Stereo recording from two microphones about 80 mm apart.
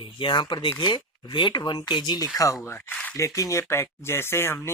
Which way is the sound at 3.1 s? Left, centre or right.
Left.